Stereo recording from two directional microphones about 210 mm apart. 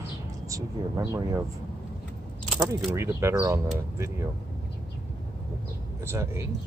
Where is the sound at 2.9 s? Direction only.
10° right (ahead or behind).